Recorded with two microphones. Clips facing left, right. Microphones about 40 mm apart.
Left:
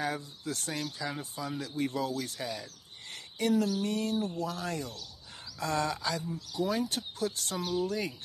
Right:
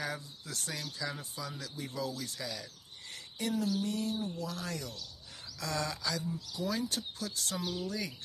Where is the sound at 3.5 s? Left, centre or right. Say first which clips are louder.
Left 4 dB; left.